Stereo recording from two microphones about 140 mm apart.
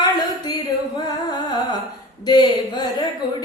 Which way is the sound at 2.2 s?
30° left (ahead or behind).